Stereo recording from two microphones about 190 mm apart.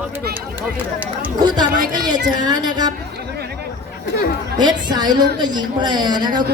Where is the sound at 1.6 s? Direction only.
20° right (ahead or behind).